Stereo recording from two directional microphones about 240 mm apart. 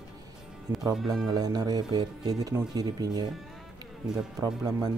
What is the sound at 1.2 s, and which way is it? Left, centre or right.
Speech, centre.